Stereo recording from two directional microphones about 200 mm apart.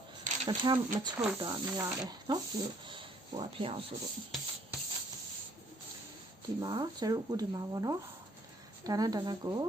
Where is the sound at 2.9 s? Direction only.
25° right (ahead or behind).